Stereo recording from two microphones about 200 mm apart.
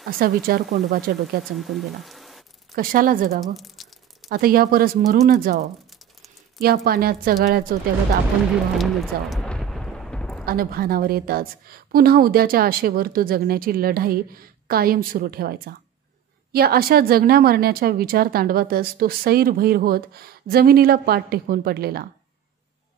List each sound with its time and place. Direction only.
0.2 s a woman's voice: 50° right (ahead or behind)
1.4 s speech: centre (ahead or behind)
2.7 s a woman's voice: 45° right (ahead or behind)
3.5 s a sound: centre (ahead or behind)
4.3 s a woman's voice: 50° right (ahead or behind)
6.6 s a woman's voice: 50° right (ahead or behind)
8.7 s eruption: centre (ahead or behind)
10.4 s a woman's voice: 45° right (ahead or behind)